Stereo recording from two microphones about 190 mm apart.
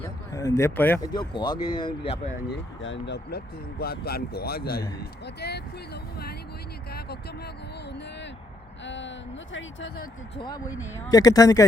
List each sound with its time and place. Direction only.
0.0 s speech: 15° left (ahead or behind)
1.0 s speech: 25° left (ahead or behind)
2.5 s speech: 70° left (ahead or behind)
8.8 s speech: 70° left (ahead or behind)
10.3 s speech: 20° left (ahead or behind)